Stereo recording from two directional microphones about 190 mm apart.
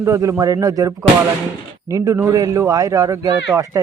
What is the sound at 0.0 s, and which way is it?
A man's voice, 15° right (ahead or behind).